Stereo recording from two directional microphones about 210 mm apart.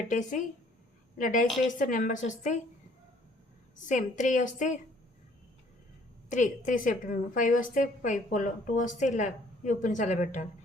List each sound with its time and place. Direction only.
0.1 s a woman's voice: 35° left (ahead or behind)
3.8 s a woman's voice: 35° left (ahead or behind)
6.2 s a woman's voice: 35° left (ahead or behind)